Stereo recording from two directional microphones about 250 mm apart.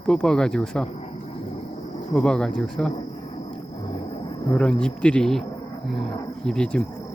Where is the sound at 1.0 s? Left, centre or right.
Left.